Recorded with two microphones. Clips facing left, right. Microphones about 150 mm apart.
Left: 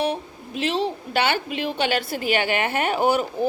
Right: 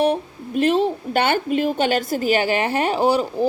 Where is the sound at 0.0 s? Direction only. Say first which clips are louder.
Right 6 dB; 50° right (ahead or behind).